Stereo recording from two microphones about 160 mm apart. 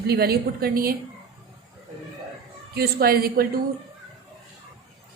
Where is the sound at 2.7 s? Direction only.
75° right (ahead or behind).